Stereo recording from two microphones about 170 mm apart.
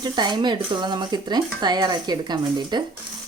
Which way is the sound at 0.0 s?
25° right (ahead or behind).